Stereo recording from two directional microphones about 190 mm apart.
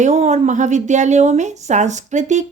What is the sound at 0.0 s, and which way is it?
Speech, 35° right (ahead or behind).